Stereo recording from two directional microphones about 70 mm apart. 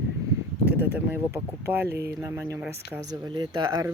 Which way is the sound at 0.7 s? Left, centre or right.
Right.